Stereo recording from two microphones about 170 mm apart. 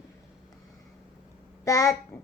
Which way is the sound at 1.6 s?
20° left (ahead or behind).